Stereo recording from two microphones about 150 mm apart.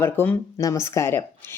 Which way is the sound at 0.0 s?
15° left (ahead or behind).